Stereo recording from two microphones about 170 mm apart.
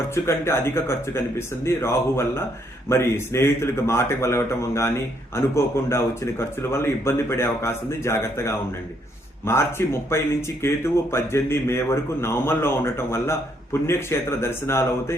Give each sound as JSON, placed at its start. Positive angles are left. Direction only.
{"t": 0.1, "sound": "speech", "side_deg": 15}